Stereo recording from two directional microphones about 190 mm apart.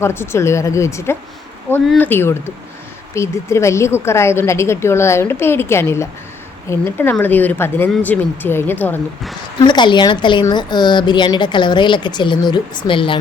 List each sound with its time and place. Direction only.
0.0 s a woman's voice: 15° left (ahead or behind)
9.6 s a woman's voice: 25° left (ahead or behind)